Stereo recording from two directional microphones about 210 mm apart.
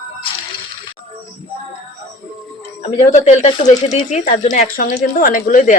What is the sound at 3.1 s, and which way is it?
Speech, 35° left (ahead or behind).